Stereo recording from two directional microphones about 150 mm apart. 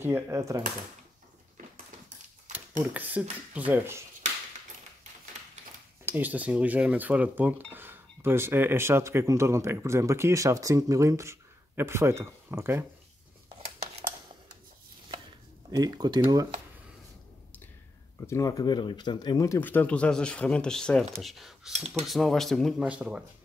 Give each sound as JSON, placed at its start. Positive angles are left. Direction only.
{"t": 0.0, "sound": "speech", "side_deg": -15}
{"t": 2.8, "sound": "speech", "side_deg": -10}
{"t": 6.0, "sound": "speech", "side_deg": -10}
{"t": 15.7, "sound": "speech", "side_deg": -30}
{"t": 18.2, "sound": "speech", "side_deg": 20}